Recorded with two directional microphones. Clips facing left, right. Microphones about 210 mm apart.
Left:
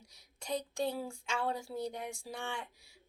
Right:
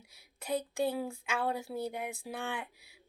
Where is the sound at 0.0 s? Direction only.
5° right (ahead or behind).